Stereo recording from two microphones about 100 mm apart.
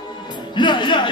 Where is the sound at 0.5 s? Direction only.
50° left (ahead or behind).